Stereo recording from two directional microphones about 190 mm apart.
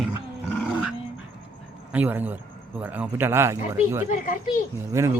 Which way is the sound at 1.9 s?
10° right (ahead or behind).